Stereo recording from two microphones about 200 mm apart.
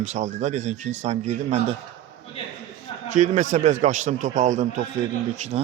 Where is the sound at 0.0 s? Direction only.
35° right (ahead or behind).